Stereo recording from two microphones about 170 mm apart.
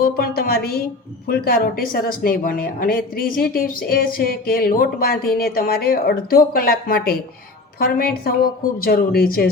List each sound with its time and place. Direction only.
0.0 s speech: 60° left (ahead or behind)